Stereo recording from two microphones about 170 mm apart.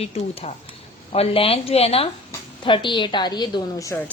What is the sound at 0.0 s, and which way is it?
A woman's voice, 35° left (ahead or behind).